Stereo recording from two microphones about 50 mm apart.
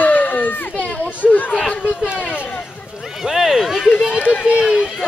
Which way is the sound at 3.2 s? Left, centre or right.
Centre.